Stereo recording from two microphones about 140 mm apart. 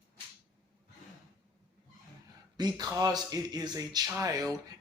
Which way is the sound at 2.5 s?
30° right (ahead or behind).